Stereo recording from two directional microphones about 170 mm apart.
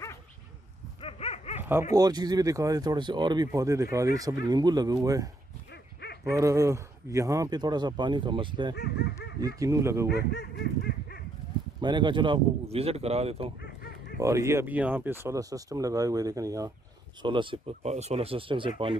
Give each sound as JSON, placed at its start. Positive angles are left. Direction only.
{"t": 1.0, "sound": "dog", "side_deg": 40}
{"t": 1.6, "sound": "dog", "side_deg": -15}
{"t": 2.0, "sound": "speech", "side_deg": -25}
{"t": 5.7, "sound": "dog", "side_deg": 75}
{"t": 6.2, "sound": "speech", "side_deg": -20}
{"t": 8.7, "sound": "speech", "side_deg": 80}
{"t": 9.6, "sound": "speech", "side_deg": -15}
{"t": 10.1, "sound": "honk", "side_deg": 75}
{"t": 11.8, "sound": "speech", "side_deg": -25}
{"t": 13.6, "sound": "a sound", "side_deg": 65}
{"t": 14.2, "sound": "speech", "side_deg": -15}